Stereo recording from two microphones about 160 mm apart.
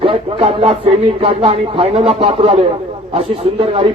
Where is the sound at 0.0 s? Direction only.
35° right (ahead or behind).